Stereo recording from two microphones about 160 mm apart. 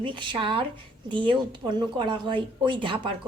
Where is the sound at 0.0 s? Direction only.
30° right (ahead or behind).